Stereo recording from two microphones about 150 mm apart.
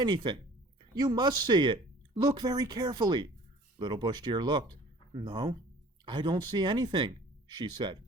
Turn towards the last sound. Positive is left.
turn(degrees=-30)  # may be behind; listen again after turning